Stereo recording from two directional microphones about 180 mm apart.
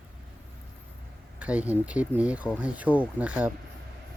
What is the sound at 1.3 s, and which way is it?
Speech, 5° right (ahead or behind).